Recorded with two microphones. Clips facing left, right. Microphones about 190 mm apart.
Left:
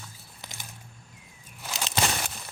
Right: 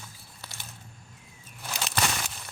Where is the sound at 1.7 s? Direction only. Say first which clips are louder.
Left 1 dB; 20° left (ahead or behind).